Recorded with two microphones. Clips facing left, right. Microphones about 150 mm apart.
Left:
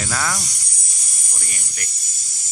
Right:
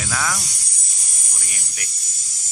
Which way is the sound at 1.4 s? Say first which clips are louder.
Left 2 dB; 5° right (ahead or behind).